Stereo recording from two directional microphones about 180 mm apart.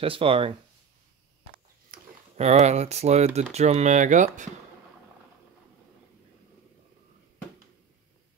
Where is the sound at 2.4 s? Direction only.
40° right (ahead or behind).